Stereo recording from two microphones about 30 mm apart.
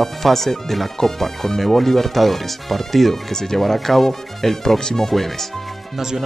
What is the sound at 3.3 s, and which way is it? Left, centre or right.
Speech, centre.